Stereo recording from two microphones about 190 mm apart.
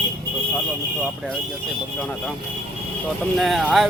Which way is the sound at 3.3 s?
Centre (ahead or behind).